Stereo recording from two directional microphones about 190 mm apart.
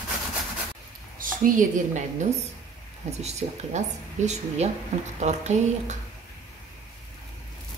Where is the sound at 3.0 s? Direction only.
35° right (ahead or behind).